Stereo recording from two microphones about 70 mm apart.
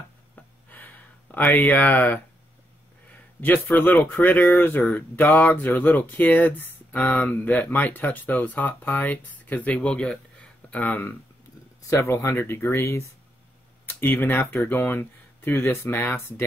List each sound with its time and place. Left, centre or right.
0.4 s a sound: left
1.7 s speech: left
3.3 s a man's voice: left
11.9 s speech: left
13.8 s speech: left
15.5 s speech: left